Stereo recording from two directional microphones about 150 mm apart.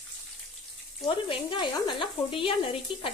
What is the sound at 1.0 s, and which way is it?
Speech, 35° left (ahead or behind).